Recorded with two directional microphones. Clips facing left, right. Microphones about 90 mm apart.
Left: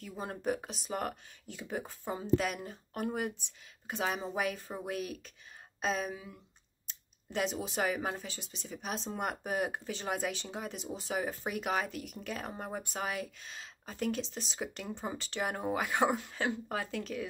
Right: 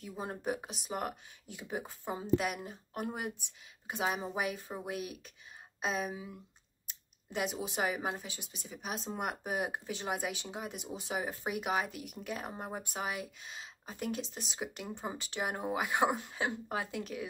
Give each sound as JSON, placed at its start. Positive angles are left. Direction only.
{"t": 0.0, "sound": "speech", "side_deg": -15}